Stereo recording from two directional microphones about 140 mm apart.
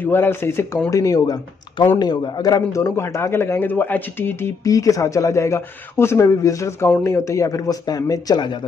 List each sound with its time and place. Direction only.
0.0 s a man's voice: 15° left (ahead or behind)